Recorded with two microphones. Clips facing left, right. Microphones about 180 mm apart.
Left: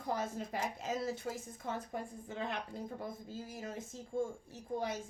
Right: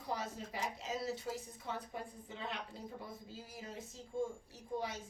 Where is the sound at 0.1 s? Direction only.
50° left (ahead or behind).